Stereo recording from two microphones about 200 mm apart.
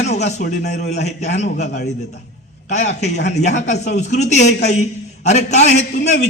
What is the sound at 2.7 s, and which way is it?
A man's voice, 35° left (ahead or behind).